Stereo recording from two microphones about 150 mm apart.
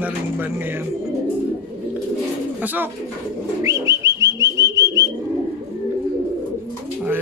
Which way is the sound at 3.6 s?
20° right (ahead or behind).